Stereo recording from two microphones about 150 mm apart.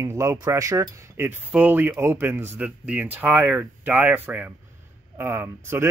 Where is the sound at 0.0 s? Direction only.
20° right (ahead or behind).